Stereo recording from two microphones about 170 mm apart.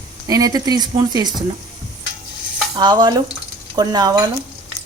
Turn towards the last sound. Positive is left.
turn(degrees=-25)  # may be behind; listen again after turning